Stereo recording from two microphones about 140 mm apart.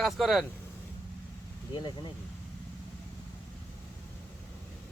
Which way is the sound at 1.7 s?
35° left (ahead or behind).